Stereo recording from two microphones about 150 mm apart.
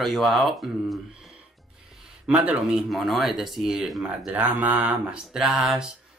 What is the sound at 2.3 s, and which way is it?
Speech, 5° right (ahead or behind).